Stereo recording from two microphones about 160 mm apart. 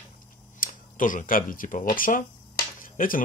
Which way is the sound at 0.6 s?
55° left (ahead or behind).